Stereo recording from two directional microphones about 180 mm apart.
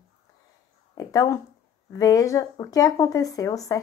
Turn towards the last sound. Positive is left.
turn(degrees=20)  # may be behind; listen again after turning